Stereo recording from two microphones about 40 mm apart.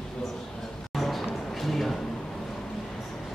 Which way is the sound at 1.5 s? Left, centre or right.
Centre.